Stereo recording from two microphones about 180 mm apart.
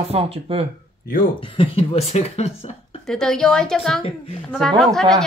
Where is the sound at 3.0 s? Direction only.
5° left (ahead or behind).